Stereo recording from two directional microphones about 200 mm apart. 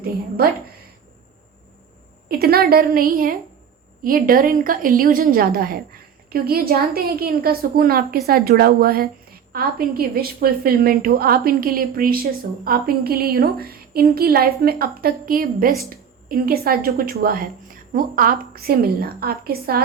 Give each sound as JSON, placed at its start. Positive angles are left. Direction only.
{"t": 0.0, "sound": "a woman's voice", "side_deg": -50}
{"t": 2.4, "sound": "a woman's voice", "side_deg": -50}